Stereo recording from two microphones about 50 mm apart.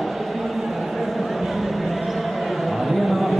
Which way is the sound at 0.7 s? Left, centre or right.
Centre.